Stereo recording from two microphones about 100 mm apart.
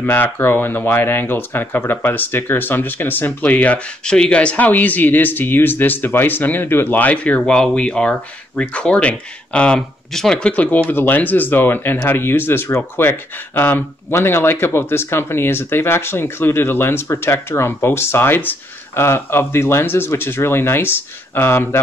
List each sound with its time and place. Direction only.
0.0 s speech: 20° left (ahead or behind)